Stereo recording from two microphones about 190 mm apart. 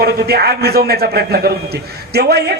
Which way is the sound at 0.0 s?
55° right (ahead or behind).